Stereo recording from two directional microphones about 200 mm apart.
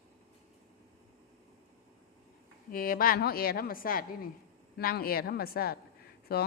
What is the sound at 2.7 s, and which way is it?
A woman's voice, 45° left (ahead or behind).